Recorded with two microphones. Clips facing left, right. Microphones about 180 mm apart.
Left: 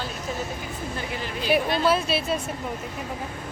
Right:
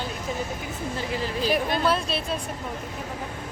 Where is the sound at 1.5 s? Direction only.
5° left (ahead or behind).